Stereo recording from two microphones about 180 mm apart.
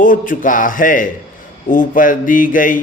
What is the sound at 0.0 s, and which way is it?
Mantra, 50° left (ahead or behind).